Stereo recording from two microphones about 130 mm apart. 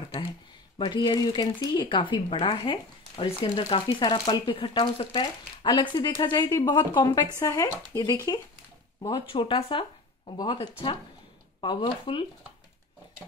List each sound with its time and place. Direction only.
0.7 s speech: 35° left (ahead or behind)
9.3 s speech: 40° left (ahead or behind)
10.3 s speech: 35° left (ahead or behind)